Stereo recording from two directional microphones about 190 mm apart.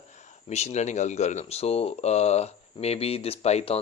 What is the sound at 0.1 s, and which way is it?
Speech, 35° left (ahead or behind).